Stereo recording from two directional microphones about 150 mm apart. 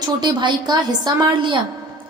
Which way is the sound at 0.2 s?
30° right (ahead or behind).